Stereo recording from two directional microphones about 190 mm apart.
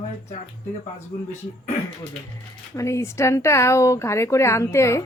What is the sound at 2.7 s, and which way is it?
A woman's voice, 15° left (ahead or behind).